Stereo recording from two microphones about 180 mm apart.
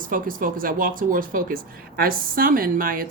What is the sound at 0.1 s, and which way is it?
Speech, 50° right (ahead or behind).